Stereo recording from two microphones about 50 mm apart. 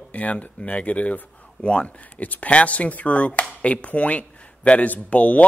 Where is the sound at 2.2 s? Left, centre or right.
Left.